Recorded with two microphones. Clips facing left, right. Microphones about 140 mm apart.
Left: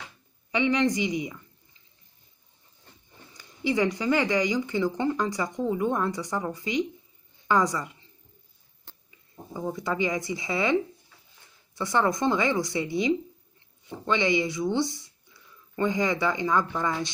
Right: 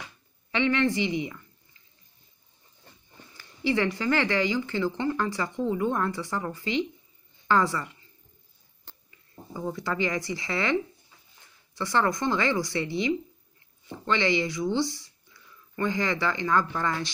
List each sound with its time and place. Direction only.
0.5 s speech: 15° left (ahead or behind)
3.3 s a woman's voice: 15° left (ahead or behind)
9.5 s speech: 15° left (ahead or behind)
14.0 s speech: 20° left (ahead or behind)